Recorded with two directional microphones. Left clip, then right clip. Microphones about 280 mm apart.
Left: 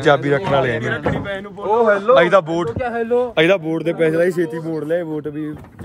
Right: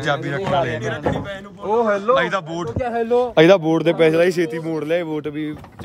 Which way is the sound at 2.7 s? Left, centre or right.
Right.